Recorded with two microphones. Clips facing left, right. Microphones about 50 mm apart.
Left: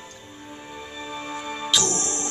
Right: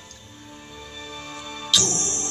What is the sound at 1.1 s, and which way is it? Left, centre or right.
Music, left.